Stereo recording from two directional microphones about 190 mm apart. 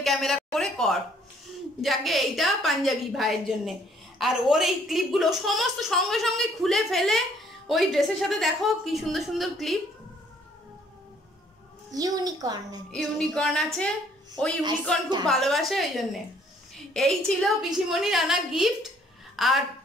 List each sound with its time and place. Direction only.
0.0 s a sound: centre (ahead or behind)
1.8 s a woman's voice: centre (ahead or behind)
11.9 s a woman's voice: 20° right (ahead or behind)
12.9 s a woman's voice: 5° left (ahead or behind)